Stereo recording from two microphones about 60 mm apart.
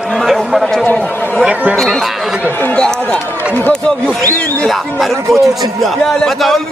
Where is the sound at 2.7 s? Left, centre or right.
Centre.